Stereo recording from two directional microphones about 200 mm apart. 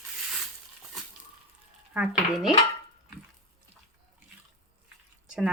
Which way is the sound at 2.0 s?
5° right (ahead or behind).